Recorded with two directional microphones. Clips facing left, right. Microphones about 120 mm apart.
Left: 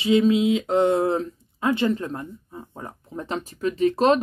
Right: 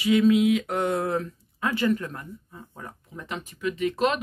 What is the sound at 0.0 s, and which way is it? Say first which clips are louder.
Speech: left 1 dB; 25° left (ahead or behind).